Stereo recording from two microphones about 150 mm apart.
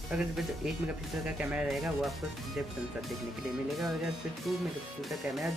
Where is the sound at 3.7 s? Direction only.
Centre (ahead or behind).